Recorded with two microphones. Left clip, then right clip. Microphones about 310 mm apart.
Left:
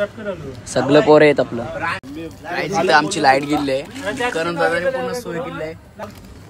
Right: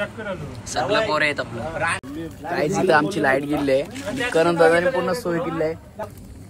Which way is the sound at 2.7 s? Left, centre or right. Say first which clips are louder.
Left 4 dB; centre.